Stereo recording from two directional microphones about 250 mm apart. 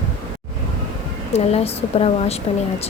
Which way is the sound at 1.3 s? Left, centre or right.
Left.